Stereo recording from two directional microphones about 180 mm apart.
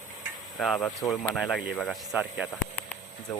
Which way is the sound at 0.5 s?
Centre (ahead or behind).